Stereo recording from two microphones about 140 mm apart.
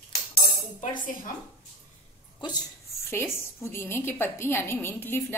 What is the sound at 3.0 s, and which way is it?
A woman's voice, 20° left (ahead or behind).